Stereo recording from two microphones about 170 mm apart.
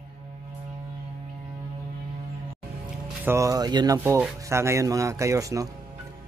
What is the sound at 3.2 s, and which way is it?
A man's voice, 15° right (ahead or behind).